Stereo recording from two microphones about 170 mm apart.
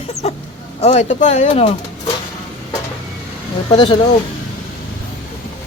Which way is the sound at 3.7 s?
25° left (ahead or behind).